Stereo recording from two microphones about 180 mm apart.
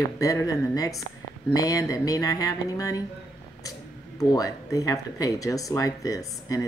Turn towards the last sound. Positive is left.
turn(degrees=20)  # may be behind; listen again after turning